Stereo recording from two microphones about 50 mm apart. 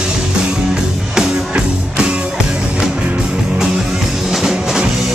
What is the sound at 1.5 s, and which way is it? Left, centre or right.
Music, centre.